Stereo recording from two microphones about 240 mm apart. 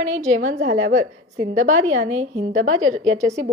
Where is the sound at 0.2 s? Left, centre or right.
Right.